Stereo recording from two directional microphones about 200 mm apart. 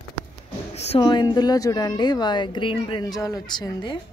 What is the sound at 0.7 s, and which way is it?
Speech, 30° left (ahead or behind).